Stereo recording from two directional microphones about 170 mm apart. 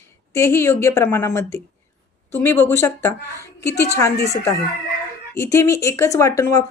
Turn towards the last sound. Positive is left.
turn(degrees=20)  # may be behind; listen again after turning